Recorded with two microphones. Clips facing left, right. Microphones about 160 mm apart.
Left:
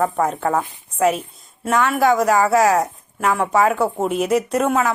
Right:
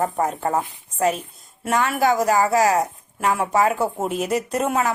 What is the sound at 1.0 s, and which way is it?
Speech, centre (ahead or behind).